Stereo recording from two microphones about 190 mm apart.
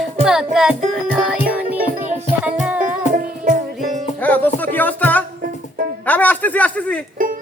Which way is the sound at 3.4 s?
45° right (ahead or behind).